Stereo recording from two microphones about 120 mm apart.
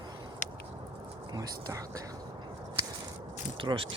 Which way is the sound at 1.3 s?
30° right (ahead or behind).